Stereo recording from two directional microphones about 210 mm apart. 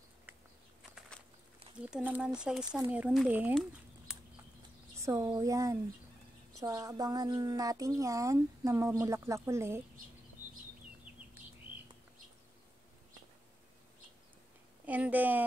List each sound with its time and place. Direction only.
1.9 s a woman's voice: 5° right (ahead or behind)
4.9 s a woman's voice: 15° right (ahead or behind)
14.9 s a woman's voice: 10° right (ahead or behind)